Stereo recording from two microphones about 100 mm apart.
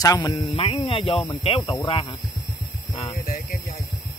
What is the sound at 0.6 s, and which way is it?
Speech, 60° left (ahead or behind).